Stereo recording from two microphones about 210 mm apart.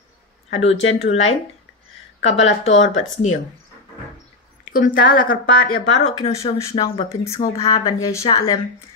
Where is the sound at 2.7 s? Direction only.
65° left (ahead or behind).